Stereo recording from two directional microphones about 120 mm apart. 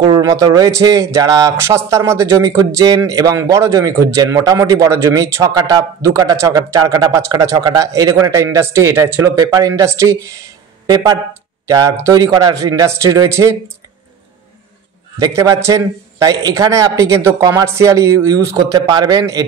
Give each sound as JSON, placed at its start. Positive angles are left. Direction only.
{"t": 0.0, "sound": "speech", "side_deg": -35}
{"t": 11.6, "sound": "speech", "side_deg": -30}
{"t": 15.1, "sound": "speech", "side_deg": -30}